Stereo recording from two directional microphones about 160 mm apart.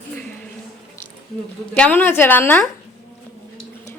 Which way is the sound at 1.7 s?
10° left (ahead or behind).